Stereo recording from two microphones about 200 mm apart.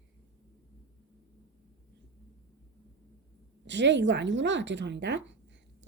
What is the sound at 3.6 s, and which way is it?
A woman's voice, 60° right (ahead or behind).